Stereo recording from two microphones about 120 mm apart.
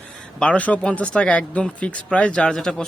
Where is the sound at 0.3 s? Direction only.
10° left (ahead or behind).